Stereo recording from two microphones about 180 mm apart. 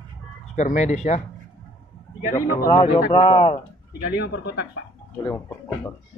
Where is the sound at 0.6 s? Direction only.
40° left (ahead or behind).